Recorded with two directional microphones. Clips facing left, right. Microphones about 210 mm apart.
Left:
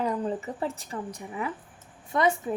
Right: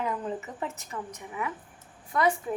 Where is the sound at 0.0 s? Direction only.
35° left (ahead or behind).